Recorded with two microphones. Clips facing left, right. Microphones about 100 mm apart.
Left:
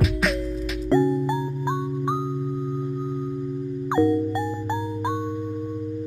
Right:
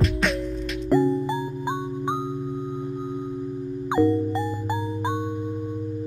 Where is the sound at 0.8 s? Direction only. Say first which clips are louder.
Even; 20° right (ahead or behind).